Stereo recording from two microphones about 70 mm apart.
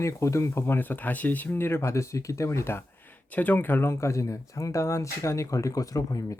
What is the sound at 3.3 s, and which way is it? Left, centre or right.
Speech, left.